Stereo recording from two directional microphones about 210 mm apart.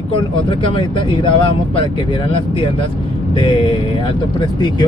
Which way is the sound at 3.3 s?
25° left (ahead or behind).